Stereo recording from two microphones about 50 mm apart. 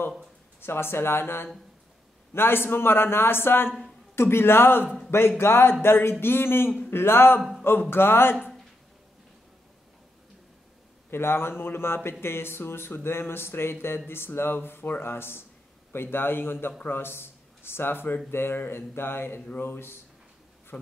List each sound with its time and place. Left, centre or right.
0.6 s speech: left
11.1 s speech: left
20.7 s speech: left